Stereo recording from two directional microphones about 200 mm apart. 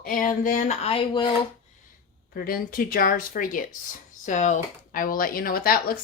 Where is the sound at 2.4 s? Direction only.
45° left (ahead or behind).